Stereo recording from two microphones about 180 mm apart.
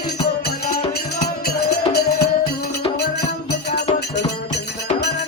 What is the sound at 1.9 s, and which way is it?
Music, 60° left (ahead or behind).